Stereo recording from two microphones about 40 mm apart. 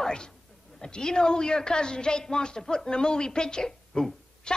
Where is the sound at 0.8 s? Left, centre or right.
Centre.